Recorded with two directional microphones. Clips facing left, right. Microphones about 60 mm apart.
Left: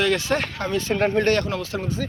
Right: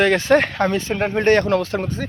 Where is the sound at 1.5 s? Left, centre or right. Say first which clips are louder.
Right 7 dB; right.